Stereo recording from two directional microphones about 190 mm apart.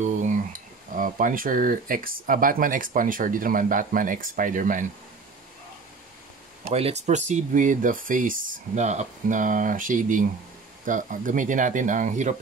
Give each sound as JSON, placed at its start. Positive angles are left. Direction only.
{"t": 0.0, "sound": "speech", "side_deg": -40}
{"t": 6.7, "sound": "speech", "side_deg": -35}